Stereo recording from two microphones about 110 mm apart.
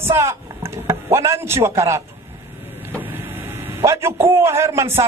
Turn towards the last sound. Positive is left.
turn(degrees=-25)  # may be behind; listen again after turning